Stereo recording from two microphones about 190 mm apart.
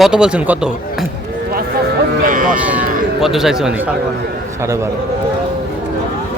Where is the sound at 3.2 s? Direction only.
Centre (ahead or behind).